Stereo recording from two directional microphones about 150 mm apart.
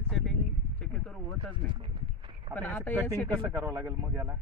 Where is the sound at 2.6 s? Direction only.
10° left (ahead or behind).